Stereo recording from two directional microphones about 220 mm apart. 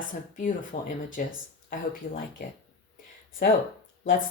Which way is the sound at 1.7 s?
40° left (ahead or behind).